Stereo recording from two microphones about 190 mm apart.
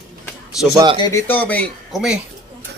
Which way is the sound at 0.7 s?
25° right (ahead or behind).